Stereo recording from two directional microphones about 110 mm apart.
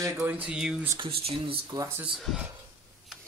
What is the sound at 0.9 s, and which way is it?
Speech, 55° right (ahead or behind).